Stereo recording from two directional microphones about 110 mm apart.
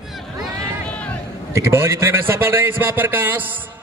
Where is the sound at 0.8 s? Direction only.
10° left (ahead or behind).